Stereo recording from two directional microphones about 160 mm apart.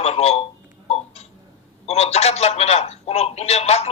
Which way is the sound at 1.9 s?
40° left (ahead or behind).